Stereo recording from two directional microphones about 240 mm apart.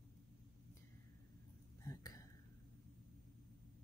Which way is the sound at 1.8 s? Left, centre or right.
Centre.